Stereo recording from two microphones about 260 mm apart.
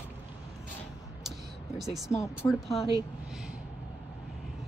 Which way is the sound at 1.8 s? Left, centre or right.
Centre.